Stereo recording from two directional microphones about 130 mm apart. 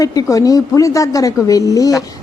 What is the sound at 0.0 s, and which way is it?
Speech, 25° left (ahead or behind).